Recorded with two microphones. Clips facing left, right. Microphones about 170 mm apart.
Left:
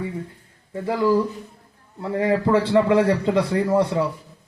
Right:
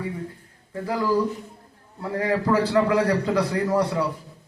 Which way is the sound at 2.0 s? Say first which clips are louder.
Left 3 dB; 25° left (ahead or behind).